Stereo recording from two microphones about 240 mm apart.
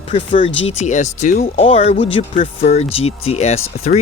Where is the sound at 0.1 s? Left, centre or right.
Left.